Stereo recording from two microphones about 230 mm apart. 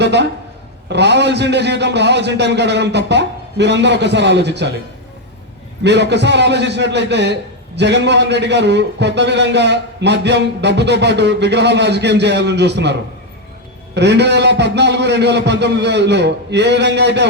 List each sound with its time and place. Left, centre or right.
0.0 s a man's voice: right
5.8 s a man's voice: right